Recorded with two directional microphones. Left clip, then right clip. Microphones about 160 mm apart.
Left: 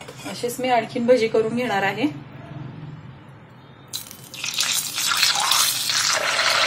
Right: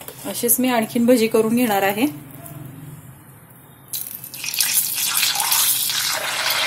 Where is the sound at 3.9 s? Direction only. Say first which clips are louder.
Left 1 dB; centre (ahead or behind).